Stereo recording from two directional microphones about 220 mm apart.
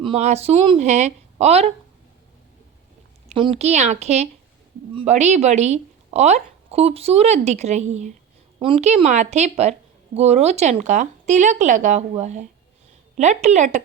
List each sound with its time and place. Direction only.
0.0 s a woman's voice: 30° right (ahead or behind)
3.2 s speech: 25° right (ahead or behind)